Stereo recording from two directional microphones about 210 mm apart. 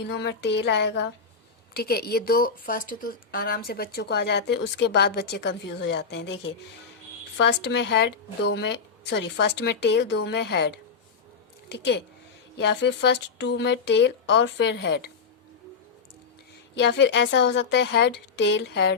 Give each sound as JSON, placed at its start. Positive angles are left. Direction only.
{"t": 0.0, "sound": "speech", "side_deg": 55}
{"t": 16.7, "sound": "speech", "side_deg": 55}